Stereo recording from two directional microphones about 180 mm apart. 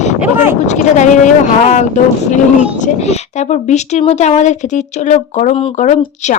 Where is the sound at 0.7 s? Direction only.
40° left (ahead or behind).